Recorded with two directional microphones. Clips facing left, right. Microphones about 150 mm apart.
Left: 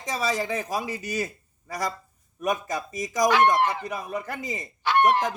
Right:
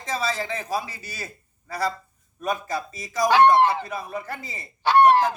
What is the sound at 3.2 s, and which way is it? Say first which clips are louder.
Speech: right 4 dB; 30° right (ahead or behind).